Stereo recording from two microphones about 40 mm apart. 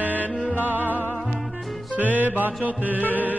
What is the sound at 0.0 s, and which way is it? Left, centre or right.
Music, right.